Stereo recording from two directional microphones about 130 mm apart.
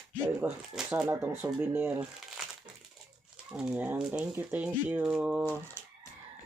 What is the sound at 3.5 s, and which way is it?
Speech, 5° right (ahead or behind).